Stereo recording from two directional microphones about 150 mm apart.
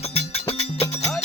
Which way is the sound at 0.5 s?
45° left (ahead or behind).